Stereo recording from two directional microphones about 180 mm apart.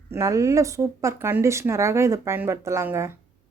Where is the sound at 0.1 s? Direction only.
15° right (ahead or behind).